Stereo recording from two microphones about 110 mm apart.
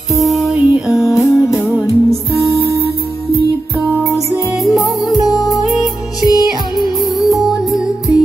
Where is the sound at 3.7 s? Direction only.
15° right (ahead or behind).